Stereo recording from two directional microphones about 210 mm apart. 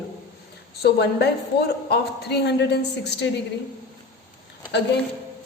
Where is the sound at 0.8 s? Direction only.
50° left (ahead or behind).